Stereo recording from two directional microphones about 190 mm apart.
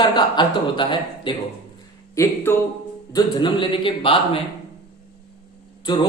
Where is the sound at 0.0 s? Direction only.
25° left (ahead or behind).